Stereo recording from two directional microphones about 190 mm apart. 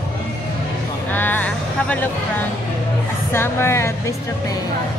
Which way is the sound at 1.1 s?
10° left (ahead or behind).